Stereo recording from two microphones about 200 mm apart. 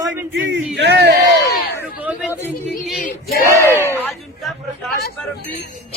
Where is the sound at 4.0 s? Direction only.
Centre (ahead or behind).